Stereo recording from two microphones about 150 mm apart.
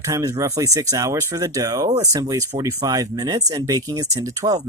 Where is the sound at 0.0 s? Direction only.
20° right (ahead or behind).